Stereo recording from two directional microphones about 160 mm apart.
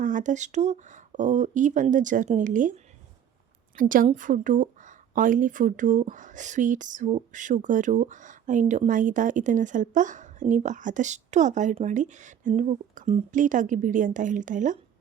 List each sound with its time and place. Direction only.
0.0 s speech: 55° right (ahead or behind)